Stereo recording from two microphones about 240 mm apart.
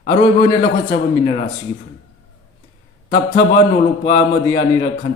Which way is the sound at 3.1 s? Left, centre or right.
Centre.